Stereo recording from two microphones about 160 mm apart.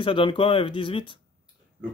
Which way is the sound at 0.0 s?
30° left (ahead or behind).